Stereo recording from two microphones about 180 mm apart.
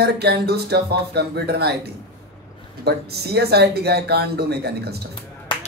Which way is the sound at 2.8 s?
65° right (ahead or behind).